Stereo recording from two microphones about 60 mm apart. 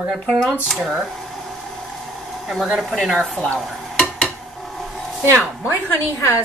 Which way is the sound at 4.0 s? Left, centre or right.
Centre.